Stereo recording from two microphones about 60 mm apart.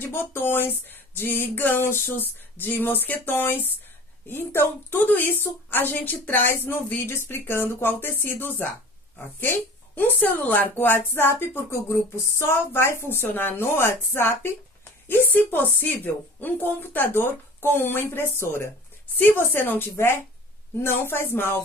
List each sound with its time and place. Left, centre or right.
0.0 s a woman's voice: left
9.9 s a woman's voice: left
11.7 s a woman's voice: left